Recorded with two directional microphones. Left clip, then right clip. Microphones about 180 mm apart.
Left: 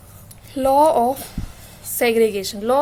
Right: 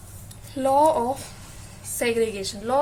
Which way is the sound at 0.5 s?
50° left (ahead or behind).